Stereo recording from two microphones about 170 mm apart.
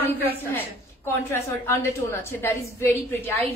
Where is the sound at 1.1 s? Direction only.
15° left (ahead or behind).